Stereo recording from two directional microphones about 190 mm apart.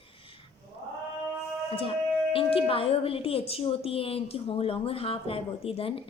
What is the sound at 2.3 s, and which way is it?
A woman's voice, 30° left (ahead or behind).